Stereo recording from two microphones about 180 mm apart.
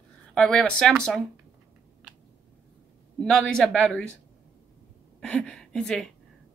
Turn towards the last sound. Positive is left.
turn(degrees=5)  # may be behind; listen again after turning